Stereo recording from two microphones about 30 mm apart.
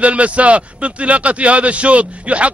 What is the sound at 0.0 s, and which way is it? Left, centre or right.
A man's voice, right.